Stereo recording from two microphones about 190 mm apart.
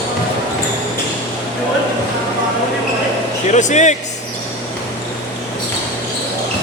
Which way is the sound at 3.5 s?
40° left (ahead or behind).